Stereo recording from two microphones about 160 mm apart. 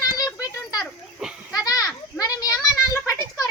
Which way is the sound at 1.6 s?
20° left (ahead or behind).